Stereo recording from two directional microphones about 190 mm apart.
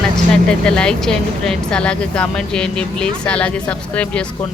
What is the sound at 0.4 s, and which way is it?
Speech, 5° left (ahead or behind).